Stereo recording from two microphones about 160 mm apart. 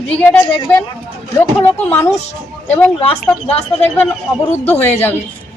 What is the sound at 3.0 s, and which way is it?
Speech, 40° left (ahead or behind).